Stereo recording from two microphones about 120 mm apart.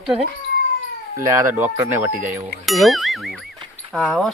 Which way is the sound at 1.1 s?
25° right (ahead or behind).